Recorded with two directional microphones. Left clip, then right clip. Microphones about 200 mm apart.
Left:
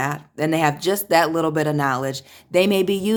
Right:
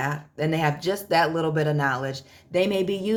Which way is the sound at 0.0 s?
35° left (ahead or behind).